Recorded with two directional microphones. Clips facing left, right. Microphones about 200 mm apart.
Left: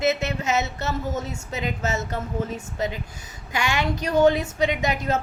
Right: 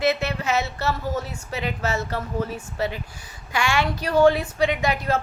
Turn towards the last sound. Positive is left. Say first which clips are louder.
# right 1 dB
turn(degrees=20)  # may be behind; listen again after turning